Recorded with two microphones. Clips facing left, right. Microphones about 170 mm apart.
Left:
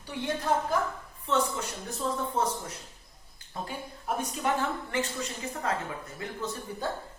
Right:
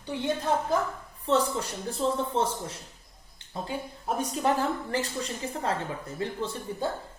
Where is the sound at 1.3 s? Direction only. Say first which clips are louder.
Right 3 dB; 35° right (ahead or behind).